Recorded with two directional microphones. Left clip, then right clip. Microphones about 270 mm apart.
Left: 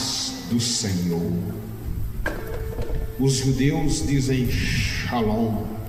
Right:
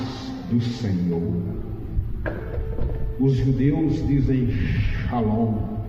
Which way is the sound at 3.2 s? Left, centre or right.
Left.